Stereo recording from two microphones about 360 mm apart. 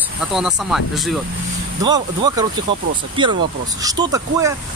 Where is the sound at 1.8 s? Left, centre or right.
Centre.